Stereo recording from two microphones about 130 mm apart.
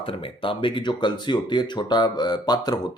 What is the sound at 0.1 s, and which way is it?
Speech, 40° left (ahead or behind).